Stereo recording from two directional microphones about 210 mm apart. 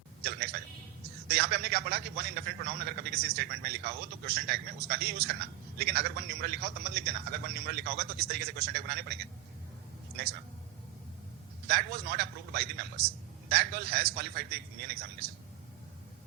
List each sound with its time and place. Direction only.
0.2 s a man's voice: 50° right (ahead or behind)
11.7 s a man's voice: 50° right (ahead or behind)